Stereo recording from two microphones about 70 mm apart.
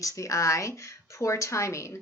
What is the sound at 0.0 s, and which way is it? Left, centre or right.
Speech, left.